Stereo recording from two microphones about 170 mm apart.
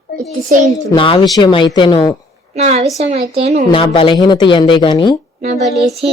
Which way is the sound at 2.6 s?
40° right (ahead or behind).